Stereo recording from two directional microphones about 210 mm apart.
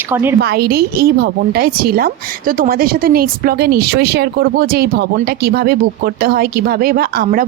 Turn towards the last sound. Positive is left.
turn(degrees=-45)  # may be behind; listen again after turning